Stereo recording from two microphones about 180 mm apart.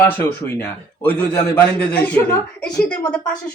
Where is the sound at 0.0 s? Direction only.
10° left (ahead or behind).